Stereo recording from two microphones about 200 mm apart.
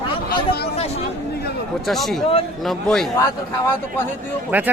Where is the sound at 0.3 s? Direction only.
50° left (ahead or behind).